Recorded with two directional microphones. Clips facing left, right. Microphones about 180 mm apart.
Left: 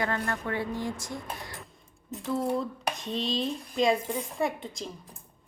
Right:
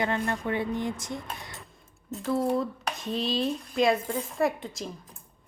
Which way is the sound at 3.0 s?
5° right (ahead or behind).